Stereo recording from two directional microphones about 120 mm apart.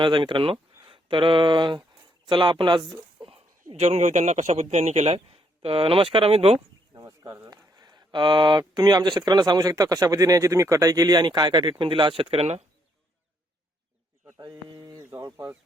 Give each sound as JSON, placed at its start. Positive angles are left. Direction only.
{"t": 0.0, "sound": "speech", "side_deg": -45}
{"t": 3.2, "sound": "a man's voice", "side_deg": -55}
{"t": 6.9, "sound": "a sound", "side_deg": -30}
{"t": 7.4, "sound": "speech", "side_deg": -35}
{"t": 14.4, "sound": "bird", "side_deg": -35}
{"t": 15.1, "sound": "bird", "side_deg": -25}